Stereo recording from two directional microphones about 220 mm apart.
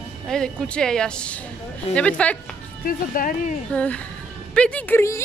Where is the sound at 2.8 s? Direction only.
40° left (ahead or behind).